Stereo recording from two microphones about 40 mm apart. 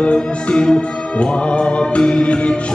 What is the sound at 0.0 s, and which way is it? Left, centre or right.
Music, left.